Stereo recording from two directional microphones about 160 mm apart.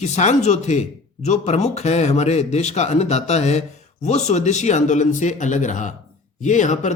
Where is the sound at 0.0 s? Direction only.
45° left (ahead or behind).